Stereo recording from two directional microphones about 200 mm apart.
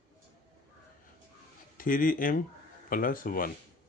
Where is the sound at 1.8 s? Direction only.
45° left (ahead or behind).